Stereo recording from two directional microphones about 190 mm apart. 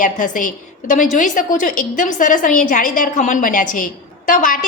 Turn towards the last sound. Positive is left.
turn(degrees=45)  # may be behind; listen again after turning